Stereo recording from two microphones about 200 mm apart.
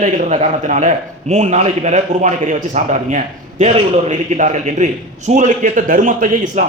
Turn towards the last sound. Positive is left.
turn(degrees=-40)  # may be behind; listen again after turning